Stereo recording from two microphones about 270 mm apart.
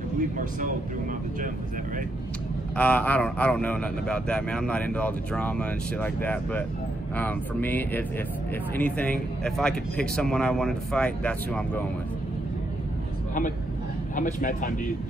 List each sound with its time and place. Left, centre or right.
0.4 s speech: right
2.7 s speech: centre
14.1 s speech: left